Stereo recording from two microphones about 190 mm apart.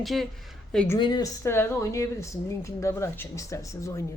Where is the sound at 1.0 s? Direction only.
20° left (ahead or behind).